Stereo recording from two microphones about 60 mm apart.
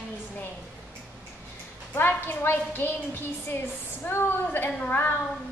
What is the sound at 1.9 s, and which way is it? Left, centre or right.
A woman's voice, left.